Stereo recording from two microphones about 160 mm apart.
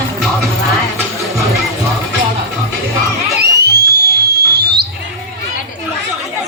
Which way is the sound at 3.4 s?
90° right.